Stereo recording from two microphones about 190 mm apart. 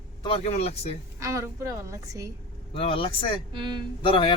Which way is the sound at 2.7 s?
30° left (ahead or behind).